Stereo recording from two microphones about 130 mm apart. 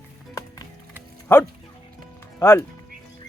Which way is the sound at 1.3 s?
15° left (ahead or behind).